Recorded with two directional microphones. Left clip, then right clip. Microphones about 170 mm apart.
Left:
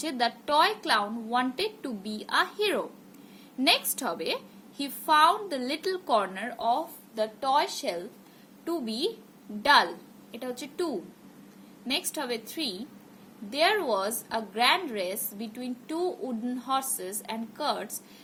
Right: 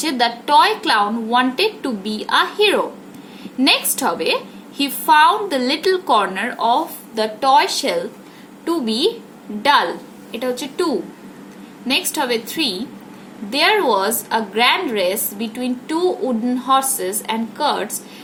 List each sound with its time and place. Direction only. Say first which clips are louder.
0.0 s a woman's voice: right 10 dB; 20° left (ahead or behind)
10.4 s a woman's voice: right 12 dB; 30° left (ahead or behind)
11.9 s a woman's voice: right 12 dB; 25° left (ahead or behind)